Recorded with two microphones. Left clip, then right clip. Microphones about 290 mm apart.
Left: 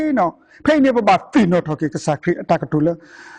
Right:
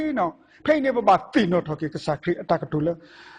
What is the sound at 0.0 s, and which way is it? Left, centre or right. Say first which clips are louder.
A man's voice: left 7 dB; left.